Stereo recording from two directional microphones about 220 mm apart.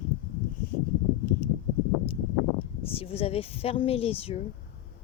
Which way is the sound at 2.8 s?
25° left (ahead or behind).